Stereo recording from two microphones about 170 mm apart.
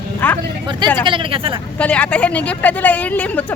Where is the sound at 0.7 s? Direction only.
25° right (ahead or behind).